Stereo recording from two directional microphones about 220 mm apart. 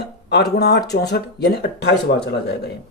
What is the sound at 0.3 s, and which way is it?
Speech, 45° left (ahead or behind).